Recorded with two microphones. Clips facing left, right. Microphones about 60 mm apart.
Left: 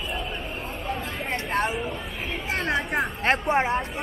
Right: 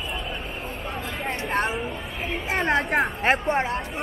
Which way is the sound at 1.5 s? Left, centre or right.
Centre.